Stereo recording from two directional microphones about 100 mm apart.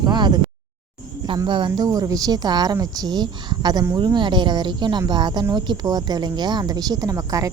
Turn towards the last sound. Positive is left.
turn(degrees=-35)  # may be behind; listen again after turning